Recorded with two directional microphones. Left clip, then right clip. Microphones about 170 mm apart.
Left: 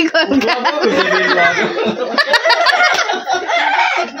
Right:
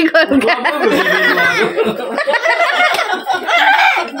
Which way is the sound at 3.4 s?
40° right (ahead or behind).